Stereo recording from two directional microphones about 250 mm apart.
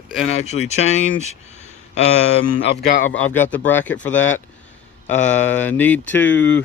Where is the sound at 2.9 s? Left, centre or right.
Left.